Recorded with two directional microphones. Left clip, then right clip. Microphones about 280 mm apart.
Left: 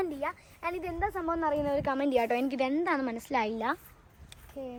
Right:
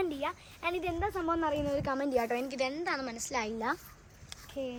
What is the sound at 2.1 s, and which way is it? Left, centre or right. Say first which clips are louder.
A woman's voice: left 3 dB; left.